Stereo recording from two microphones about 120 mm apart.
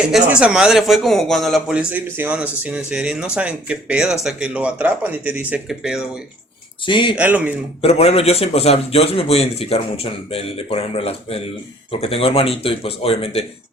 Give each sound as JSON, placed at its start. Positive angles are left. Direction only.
{"t": 0.3, "sound": "speech", "side_deg": -10}
{"t": 6.8, "sound": "speech", "side_deg": 40}
{"t": 7.2, "sound": "speech", "side_deg": -15}
{"t": 7.8, "sound": "a man's voice", "side_deg": 60}